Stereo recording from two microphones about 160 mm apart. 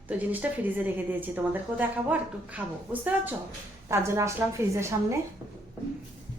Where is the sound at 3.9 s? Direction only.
15° right (ahead or behind).